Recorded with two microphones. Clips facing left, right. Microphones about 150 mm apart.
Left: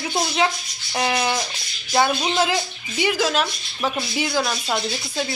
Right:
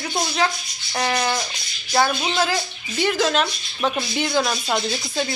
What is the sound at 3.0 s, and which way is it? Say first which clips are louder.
Speech: right 1 dB; 10° left (ahead or behind).